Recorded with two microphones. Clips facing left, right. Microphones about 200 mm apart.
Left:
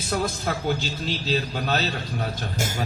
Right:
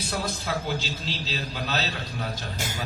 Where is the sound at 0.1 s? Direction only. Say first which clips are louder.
Left 5 dB; 50° left (ahead or behind).